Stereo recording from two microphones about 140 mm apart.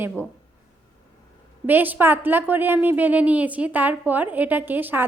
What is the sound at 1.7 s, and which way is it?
A woman's voice, 15° right (ahead or behind).